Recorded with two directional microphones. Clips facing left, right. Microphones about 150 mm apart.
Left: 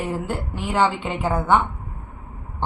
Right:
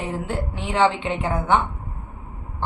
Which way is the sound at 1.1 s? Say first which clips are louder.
Left 1 dB; 10° left (ahead or behind).